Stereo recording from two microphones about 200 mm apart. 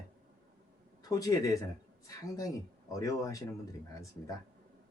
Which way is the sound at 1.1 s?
15° left (ahead or behind).